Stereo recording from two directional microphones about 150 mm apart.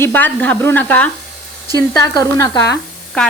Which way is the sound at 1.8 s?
25° left (ahead or behind).